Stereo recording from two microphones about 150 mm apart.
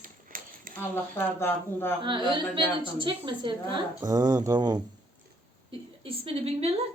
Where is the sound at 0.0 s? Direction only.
65° right (ahead or behind).